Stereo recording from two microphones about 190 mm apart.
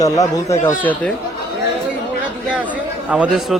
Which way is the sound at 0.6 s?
10° left (ahead or behind).